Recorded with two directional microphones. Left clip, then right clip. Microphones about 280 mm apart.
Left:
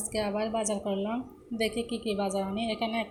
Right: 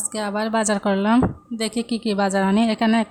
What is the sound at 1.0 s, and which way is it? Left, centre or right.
Speech, right.